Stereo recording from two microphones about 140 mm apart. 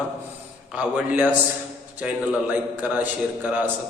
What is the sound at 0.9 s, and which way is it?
A man's voice, 10° right (ahead or behind).